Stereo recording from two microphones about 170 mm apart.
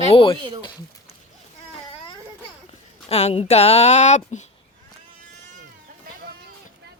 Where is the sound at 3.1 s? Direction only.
40° left (ahead or behind).